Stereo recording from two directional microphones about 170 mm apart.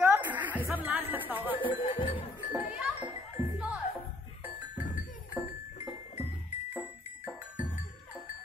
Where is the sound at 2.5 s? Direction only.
10° right (ahead or behind).